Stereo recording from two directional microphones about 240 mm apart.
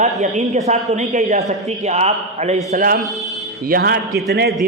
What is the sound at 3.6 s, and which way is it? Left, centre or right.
Speech, right.